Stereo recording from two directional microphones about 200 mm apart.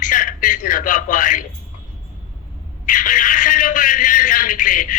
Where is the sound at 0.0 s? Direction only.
40° left (ahead or behind).